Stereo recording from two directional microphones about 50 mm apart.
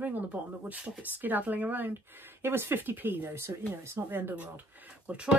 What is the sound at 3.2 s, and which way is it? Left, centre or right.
Speech, right.